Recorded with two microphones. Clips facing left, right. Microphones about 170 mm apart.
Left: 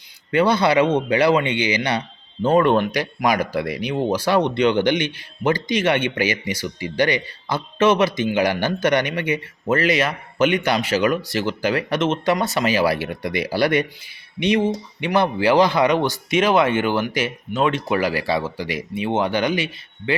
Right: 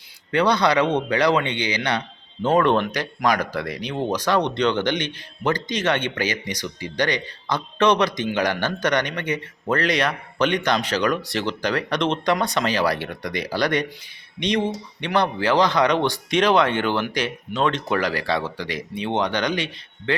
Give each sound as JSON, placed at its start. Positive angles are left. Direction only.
{"t": 0.3, "sound": "speech", "side_deg": 5}